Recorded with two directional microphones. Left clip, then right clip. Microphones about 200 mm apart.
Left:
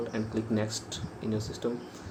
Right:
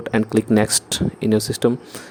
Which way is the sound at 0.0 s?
60° right (ahead or behind).